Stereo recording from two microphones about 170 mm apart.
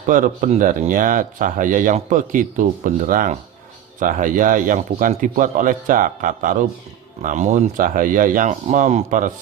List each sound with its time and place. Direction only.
0.0 s a man's voice: 50° right (ahead or behind)